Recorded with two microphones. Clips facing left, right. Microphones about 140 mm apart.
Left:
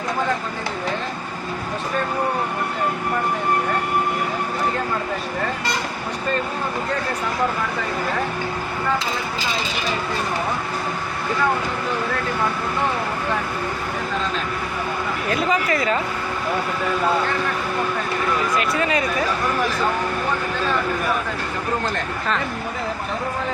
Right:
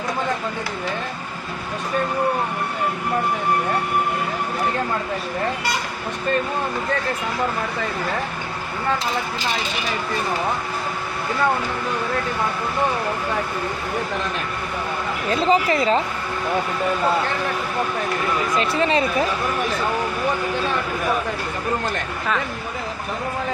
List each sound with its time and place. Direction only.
15.3 s speech: 30° right (ahead or behind)
18.5 s speech: 30° right (ahead or behind)